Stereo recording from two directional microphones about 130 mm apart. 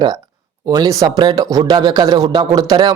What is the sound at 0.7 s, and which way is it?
Speech, 30° right (ahead or behind).